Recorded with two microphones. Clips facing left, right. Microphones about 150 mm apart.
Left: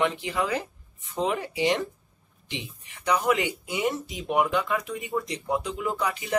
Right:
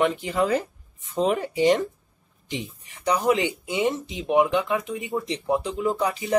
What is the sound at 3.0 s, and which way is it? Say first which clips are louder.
Speech: right 2 dB; 30° right (ahead or behind).